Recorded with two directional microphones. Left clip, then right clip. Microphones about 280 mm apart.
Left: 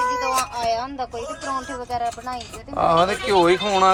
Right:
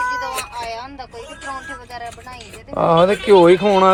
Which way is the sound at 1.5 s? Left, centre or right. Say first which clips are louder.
Left 3 dB; left.